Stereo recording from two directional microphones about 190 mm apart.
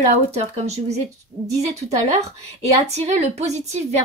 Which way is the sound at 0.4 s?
35° right (ahead or behind).